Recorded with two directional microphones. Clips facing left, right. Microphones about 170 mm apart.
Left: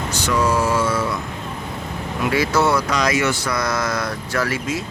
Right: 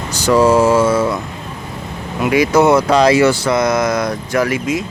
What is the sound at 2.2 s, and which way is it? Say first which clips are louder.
Speech: right 7 dB; 15° right (ahead or behind).